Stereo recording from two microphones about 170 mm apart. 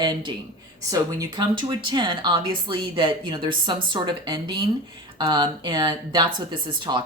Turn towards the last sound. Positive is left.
turn(degrees=-25)  # may be behind; listen again after turning